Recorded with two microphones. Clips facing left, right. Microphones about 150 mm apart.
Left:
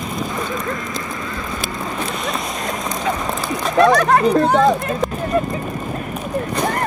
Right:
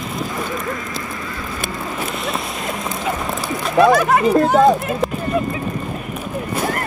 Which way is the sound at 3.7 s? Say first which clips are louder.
Even; 5° right (ahead or behind).